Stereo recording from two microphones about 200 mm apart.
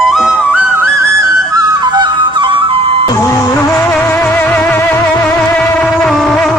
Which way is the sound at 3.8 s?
10° left (ahead or behind).